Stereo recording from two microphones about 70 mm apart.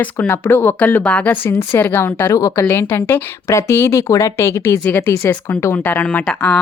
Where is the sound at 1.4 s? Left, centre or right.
Left.